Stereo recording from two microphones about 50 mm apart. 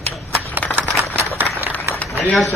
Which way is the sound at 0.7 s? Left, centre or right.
Right.